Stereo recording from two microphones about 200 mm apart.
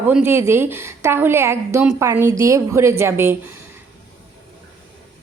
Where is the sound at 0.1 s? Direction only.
10° right (ahead or behind).